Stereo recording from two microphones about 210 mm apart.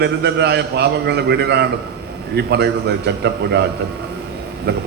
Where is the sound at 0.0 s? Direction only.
55° right (ahead or behind).